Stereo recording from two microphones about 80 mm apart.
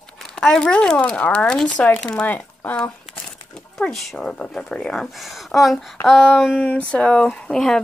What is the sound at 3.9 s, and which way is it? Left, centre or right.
Speech, centre.